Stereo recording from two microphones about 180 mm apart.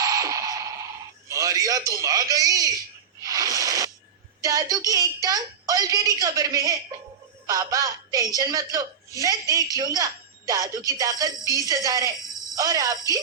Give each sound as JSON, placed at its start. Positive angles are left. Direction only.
{"t": 0.0, "sound": "music", "side_deg": -20}
{"t": 1.3, "sound": "a man's voice", "side_deg": -20}
{"t": 3.2, "sound": "music", "side_deg": -20}
{"t": 4.4, "sound": "a woman's voice", "side_deg": -20}